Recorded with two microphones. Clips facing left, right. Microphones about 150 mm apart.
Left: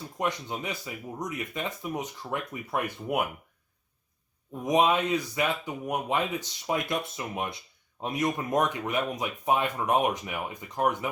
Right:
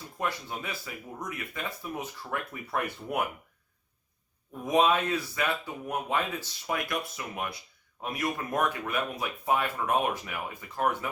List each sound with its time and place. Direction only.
0.2 s speech: 20° left (ahead or behind)
4.6 s speech: 15° left (ahead or behind)